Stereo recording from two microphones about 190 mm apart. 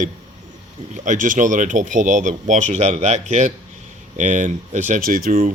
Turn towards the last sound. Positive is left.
turn(degrees=-50)  # may be behind; listen again after turning